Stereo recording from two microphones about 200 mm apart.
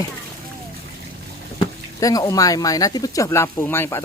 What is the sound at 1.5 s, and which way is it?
Speech, 15° left (ahead or behind).